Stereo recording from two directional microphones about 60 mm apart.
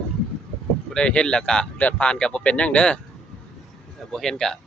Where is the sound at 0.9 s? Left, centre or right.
Centre.